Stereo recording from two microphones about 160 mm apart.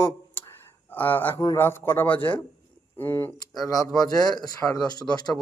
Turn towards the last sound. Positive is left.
turn(degrees=25)  # may be behind; listen again after turning